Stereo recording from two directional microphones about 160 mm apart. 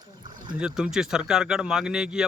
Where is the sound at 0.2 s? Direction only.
25° right (ahead or behind).